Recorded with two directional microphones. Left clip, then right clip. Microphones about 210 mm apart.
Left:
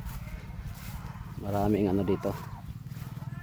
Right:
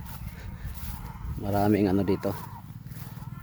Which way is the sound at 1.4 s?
35° right (ahead or behind).